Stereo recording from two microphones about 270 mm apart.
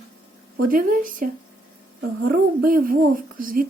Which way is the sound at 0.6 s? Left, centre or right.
Right.